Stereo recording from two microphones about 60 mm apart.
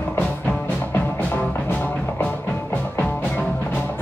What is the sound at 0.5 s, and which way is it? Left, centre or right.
Music, left.